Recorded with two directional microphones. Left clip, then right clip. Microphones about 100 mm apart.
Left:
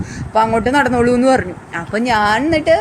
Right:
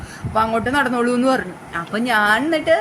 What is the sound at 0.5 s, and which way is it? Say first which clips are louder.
A woman's voice: left 5 dB; 40° left (ahead or behind).